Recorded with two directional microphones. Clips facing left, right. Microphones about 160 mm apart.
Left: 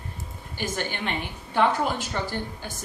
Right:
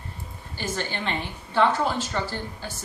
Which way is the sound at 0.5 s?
15° left (ahead or behind).